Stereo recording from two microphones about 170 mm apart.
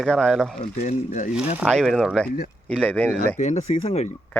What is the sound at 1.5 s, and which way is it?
Speech, centre (ahead or behind).